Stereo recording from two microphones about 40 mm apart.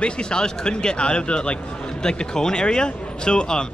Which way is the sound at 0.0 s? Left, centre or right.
Left.